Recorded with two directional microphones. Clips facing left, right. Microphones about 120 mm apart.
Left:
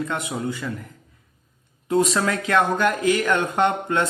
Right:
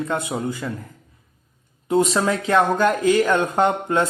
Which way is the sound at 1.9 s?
25° right (ahead or behind).